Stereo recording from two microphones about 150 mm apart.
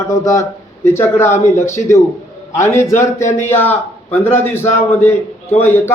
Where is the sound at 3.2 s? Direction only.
50° left (ahead or behind).